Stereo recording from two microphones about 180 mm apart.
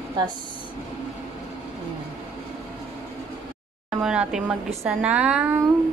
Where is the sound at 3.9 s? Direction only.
5° right (ahead or behind).